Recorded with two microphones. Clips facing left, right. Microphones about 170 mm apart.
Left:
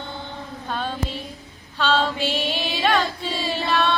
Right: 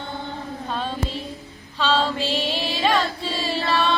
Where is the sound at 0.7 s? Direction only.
Centre (ahead or behind).